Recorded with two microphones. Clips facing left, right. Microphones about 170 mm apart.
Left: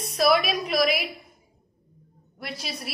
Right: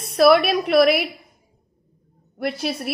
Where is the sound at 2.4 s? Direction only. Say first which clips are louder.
Right 11 dB; 55° right (ahead or behind).